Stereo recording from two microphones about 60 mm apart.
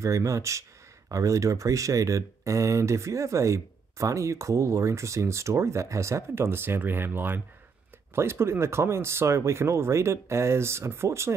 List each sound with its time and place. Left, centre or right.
0.0 s speech: right
8.1 s speech: right